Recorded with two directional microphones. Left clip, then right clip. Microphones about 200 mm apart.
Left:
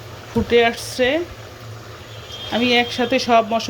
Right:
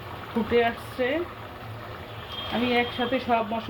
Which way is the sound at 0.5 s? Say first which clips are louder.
Left 8 dB; 40° left (ahead or behind).